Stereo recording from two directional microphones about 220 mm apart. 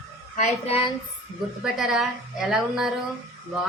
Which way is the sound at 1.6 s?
Centre (ahead or behind).